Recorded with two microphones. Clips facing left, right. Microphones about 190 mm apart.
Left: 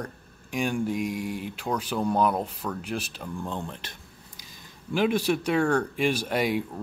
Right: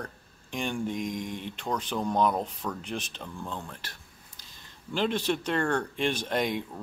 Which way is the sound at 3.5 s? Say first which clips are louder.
Left 4 dB; 20° left (ahead or behind).